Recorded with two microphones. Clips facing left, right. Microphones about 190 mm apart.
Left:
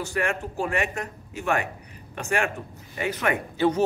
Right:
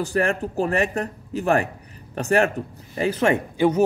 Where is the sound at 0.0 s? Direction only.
35° right (ahead or behind).